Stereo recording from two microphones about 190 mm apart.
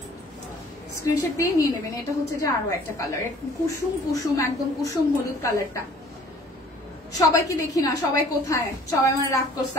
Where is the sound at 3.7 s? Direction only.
15° left (ahead or behind).